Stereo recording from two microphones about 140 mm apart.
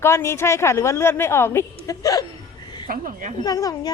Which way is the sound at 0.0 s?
20° left (ahead or behind).